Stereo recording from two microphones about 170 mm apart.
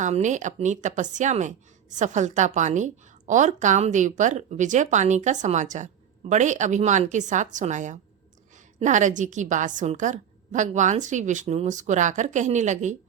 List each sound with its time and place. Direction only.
0.0 s a woman's voice: 45° right (ahead or behind)